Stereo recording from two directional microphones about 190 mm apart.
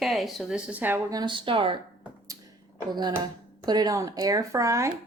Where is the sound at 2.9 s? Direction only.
20° right (ahead or behind).